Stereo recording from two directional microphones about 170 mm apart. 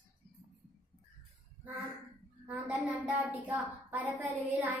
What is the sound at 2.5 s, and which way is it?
Speech, 5° right (ahead or behind).